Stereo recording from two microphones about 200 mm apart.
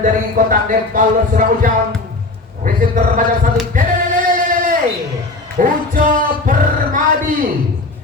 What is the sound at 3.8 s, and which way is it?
Speech, 40° right (ahead or behind).